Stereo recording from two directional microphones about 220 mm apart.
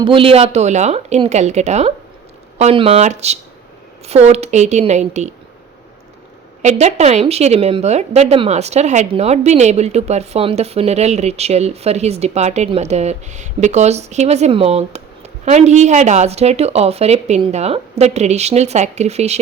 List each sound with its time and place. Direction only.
0.0 s speech: 25° right (ahead or behind)
6.6 s speech: 30° right (ahead or behind)